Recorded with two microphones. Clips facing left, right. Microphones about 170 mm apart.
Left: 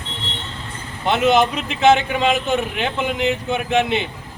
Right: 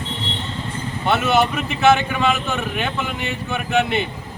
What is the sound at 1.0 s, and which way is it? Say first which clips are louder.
A man's voice: left 2 dB; 20° left (ahead or behind).